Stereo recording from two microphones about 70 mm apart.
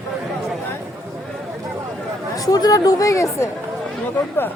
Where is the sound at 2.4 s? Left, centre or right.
Left.